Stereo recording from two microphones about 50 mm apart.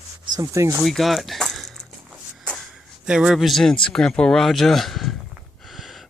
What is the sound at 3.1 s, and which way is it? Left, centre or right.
Speech, centre.